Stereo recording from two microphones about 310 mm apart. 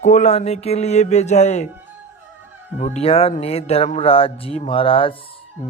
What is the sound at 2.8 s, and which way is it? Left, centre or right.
Speech, left.